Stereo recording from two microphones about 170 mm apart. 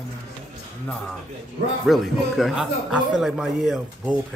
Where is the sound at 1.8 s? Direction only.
Centre (ahead or behind).